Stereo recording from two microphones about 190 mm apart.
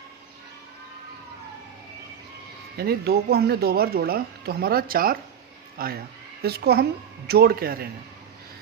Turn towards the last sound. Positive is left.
turn(degrees=-50)  # may be behind; listen again after turning